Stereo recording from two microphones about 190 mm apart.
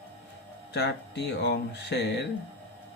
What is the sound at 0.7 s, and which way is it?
Speech, 65° left (ahead or behind).